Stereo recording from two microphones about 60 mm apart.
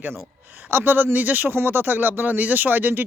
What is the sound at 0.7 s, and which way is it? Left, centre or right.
Speech, right.